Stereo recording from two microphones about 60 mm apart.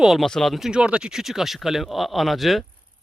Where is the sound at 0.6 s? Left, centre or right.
Centre.